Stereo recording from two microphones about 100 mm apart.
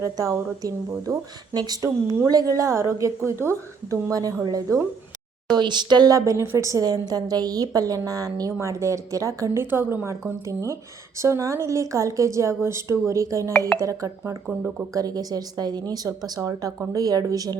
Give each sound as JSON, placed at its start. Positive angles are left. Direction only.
{"t": 0.0, "sound": "speech", "side_deg": -35}
{"t": 5.5, "sound": "speech", "side_deg": -50}
{"t": 9.6, "sound": "a woman's voice", "side_deg": -20}